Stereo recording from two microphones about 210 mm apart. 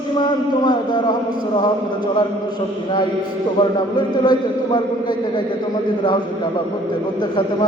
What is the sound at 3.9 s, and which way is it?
Mantra, 20° left (ahead or behind).